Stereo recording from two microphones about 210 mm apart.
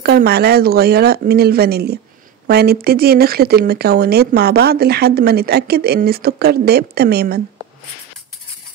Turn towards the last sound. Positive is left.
turn(degrees=-50)  # may be behind; listen again after turning